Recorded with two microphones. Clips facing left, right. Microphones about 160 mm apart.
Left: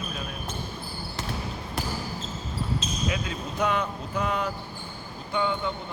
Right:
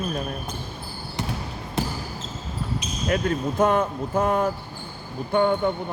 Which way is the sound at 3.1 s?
50° right (ahead or behind).